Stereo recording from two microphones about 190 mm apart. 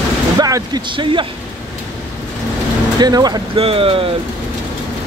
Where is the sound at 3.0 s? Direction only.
20° right (ahead or behind).